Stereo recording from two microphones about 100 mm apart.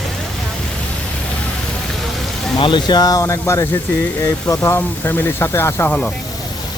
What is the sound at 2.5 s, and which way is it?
Speech, 50° left (ahead or behind).